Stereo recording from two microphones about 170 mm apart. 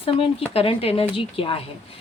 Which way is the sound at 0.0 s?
35° left (ahead or behind).